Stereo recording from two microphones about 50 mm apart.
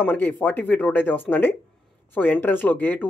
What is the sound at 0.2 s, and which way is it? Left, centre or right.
Speech, left.